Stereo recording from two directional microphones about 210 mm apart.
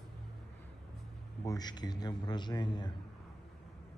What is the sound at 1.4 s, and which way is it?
A man's voice, 15° left (ahead or behind).